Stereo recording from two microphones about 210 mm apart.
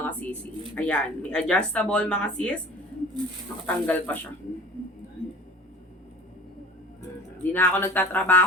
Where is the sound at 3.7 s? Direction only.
10° left (ahead or behind).